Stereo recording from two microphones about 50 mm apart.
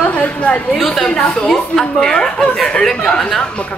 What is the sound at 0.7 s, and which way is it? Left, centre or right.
Speech, centre.